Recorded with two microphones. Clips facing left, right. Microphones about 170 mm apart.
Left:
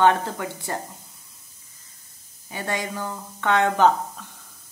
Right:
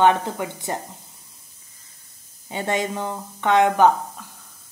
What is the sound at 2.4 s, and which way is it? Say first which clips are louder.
Speech: right 5 dB; 25° right (ahead or behind).